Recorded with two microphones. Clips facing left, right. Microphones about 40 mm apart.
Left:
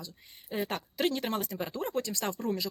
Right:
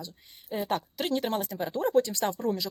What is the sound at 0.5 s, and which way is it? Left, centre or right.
Speech, centre.